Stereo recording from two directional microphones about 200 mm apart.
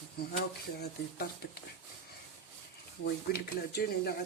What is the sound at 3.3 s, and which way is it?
Speech, 55° left (ahead or behind).